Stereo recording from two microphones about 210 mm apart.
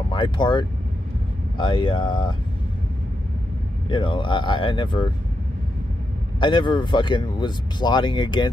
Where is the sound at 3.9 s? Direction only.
25° left (ahead or behind).